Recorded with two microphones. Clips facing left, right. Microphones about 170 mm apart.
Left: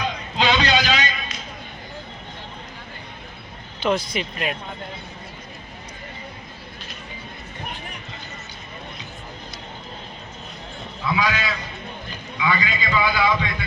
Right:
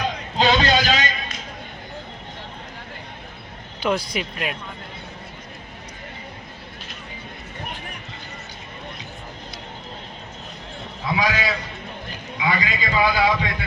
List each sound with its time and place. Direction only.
0.0 s a sound: 45° right (ahead or behind)
3.8 s speech: 5° right (ahead or behind)
11.1 s a man's voice: 40° right (ahead or behind)